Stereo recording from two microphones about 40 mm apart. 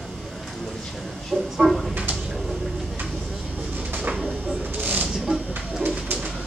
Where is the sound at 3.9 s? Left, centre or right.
Right.